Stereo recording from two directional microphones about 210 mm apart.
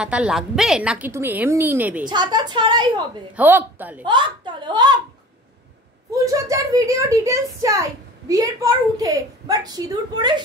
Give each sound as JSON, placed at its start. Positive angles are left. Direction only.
{"t": 0.0, "sound": "a child's voice", "side_deg": -5}
{"t": 2.0, "sound": "a woman's voice", "side_deg": -20}
{"t": 3.3, "sound": "a child's voice", "side_deg": -10}
{"t": 4.0, "sound": "a woman's voice", "side_deg": -20}
{"t": 6.1, "sound": "a child's voice", "side_deg": -15}